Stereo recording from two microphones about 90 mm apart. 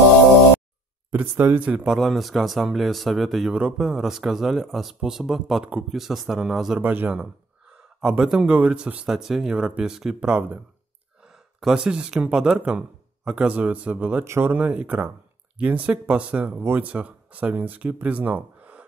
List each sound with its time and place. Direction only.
1.1 s speech: 25° right (ahead or behind)
1.6 s speech: 15° right (ahead or behind)
1.9 s speech: centre (ahead or behind)
6.8 s speech: 20° right (ahead or behind)
14.2 s speech: 30° right (ahead or behind)
14.5 s speech: 20° right (ahead or behind)
18.0 s gasp: 15° right (ahead or behind)